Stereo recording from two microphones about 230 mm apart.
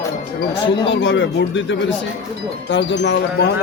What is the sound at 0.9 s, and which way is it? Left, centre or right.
Speech, left.